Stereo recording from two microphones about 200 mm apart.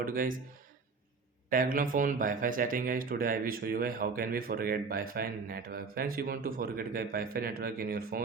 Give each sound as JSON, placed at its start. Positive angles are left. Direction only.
{"t": 0.0, "sound": "speech", "side_deg": -45}
{"t": 1.5, "sound": "speech", "side_deg": -45}